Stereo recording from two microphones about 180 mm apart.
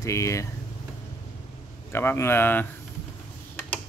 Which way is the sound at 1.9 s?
10° left (ahead or behind).